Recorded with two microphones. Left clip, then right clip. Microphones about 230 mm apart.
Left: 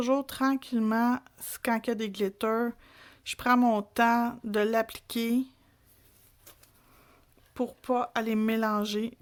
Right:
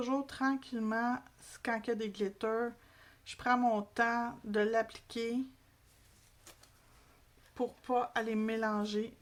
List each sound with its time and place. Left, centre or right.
0.0 s speech: left
7.5 s speech: left